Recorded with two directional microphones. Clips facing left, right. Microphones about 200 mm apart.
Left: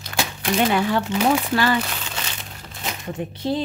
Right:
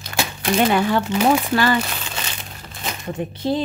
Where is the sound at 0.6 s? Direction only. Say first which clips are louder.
Right 2 dB; 45° right (ahead or behind).